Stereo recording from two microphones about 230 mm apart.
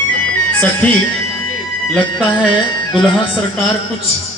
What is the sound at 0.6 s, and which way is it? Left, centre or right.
Speech, centre.